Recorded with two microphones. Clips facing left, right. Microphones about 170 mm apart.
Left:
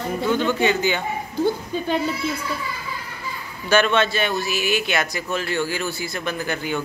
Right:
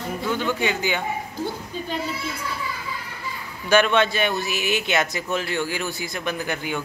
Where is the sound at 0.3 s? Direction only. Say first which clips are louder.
Left 4 dB; 10° right (ahead or behind).